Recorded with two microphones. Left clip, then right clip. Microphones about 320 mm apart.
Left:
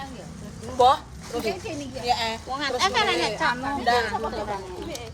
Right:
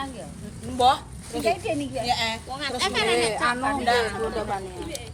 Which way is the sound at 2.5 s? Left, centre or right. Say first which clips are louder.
Left 3 dB; left.